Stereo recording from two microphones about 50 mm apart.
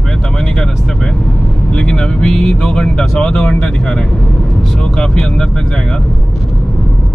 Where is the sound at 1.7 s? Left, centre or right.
Centre.